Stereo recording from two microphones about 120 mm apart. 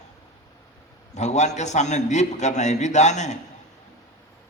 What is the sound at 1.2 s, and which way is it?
A man's voice, 75° left (ahead or behind).